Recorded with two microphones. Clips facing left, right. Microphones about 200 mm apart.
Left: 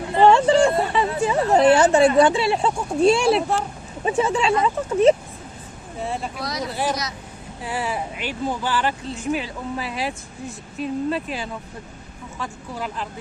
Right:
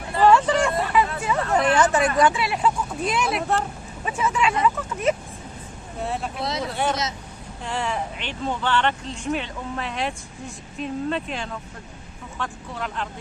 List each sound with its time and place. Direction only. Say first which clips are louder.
0.1 s a sound: left 3 dB; 25° left (ahead or behind)
3.0 s speech: left 10 dB; 30° left (ahead or behind)
6.0 s speech: even; centre (ahead or behind)
6.4 s speech: right 3 dB; 25° right (ahead or behind)
6.7 s speech: even; centre (ahead or behind)